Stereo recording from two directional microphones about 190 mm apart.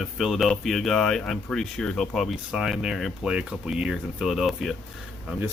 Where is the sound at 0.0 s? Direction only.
Centre (ahead or behind).